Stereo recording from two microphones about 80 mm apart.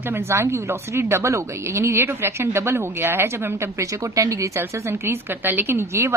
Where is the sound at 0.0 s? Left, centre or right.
Right.